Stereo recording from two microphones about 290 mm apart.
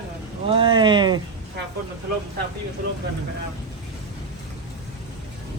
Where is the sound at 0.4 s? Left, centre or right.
Centre.